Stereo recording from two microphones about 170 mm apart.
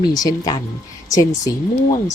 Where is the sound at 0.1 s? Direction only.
20° left (ahead or behind).